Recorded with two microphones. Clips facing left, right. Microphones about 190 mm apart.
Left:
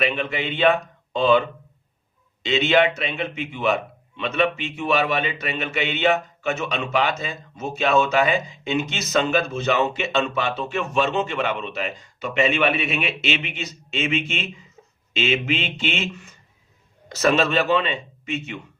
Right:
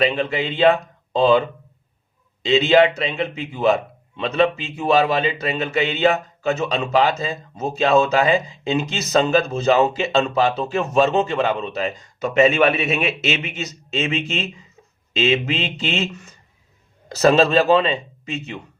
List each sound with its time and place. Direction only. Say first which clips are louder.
0.0 s a man's voice: right 4 dB; 30° right (ahead or behind)